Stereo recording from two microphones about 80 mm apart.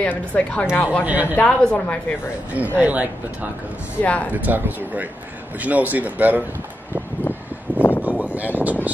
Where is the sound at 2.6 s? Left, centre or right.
Centre.